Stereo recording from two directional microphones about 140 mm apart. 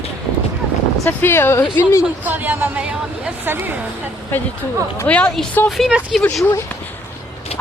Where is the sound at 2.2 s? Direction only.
15° right (ahead or behind).